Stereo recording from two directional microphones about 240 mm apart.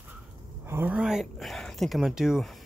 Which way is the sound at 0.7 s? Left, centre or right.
Centre.